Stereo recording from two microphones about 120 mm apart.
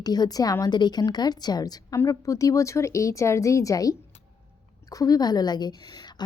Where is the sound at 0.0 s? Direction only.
35° left (ahead or behind).